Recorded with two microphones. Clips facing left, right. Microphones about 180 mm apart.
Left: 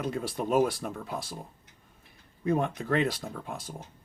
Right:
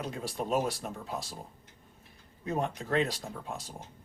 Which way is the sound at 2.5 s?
55° left (ahead or behind).